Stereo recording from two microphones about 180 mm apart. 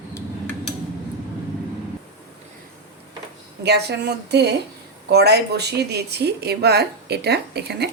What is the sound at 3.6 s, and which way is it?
A woman's voice, 65° right (ahead or behind).